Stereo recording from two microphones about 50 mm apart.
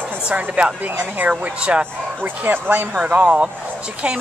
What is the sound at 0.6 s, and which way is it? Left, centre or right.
A woman's voice, right.